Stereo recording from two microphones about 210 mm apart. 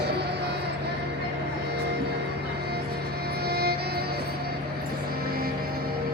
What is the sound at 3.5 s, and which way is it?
Music, 50° right (ahead or behind).